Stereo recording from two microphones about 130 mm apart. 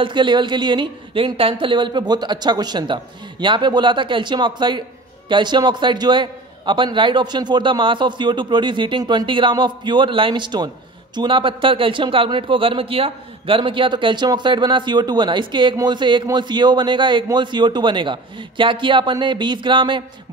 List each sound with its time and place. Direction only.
0.0 s a man's voice: 35° right (ahead or behind)